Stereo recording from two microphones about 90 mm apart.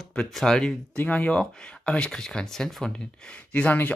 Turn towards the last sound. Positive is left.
turn(degrees=20)  # may be behind; listen again after turning